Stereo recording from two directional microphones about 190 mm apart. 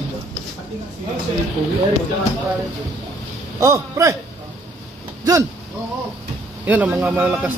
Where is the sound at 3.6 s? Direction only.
15° right (ahead or behind).